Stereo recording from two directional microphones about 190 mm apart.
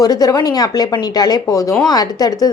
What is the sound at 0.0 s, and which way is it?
A woman's voice, 20° left (ahead or behind).